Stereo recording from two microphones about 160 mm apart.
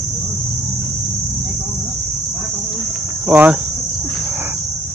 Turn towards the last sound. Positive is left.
turn(degrees=-10)  # may be behind; listen again after turning